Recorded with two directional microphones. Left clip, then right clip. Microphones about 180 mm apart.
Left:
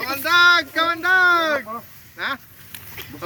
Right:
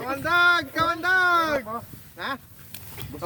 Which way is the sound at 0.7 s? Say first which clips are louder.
Left 4 dB; 70° right (ahead or behind).